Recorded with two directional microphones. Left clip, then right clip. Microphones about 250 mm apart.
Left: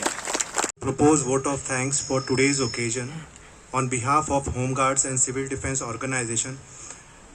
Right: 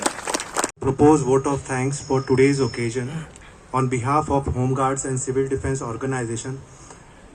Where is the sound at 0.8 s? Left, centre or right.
Centre.